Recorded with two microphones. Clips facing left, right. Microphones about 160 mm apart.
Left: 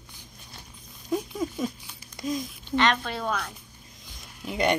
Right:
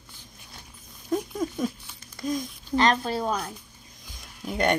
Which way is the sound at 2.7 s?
35° right (ahead or behind).